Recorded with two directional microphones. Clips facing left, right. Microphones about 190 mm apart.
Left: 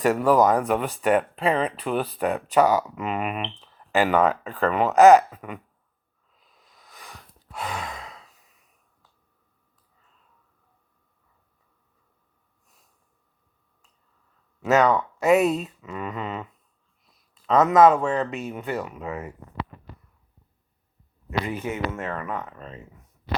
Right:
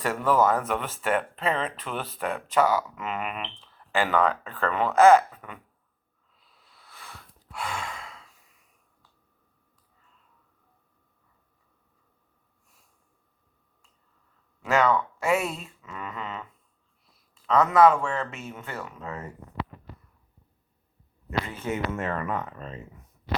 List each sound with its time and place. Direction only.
0.0 s a man's voice: 15° left (ahead or behind)
6.6 s sigh: 15° left (ahead or behind)
14.6 s a man's voice: 20° left (ahead or behind)
21.2 s a man's voice: 15° left (ahead or behind)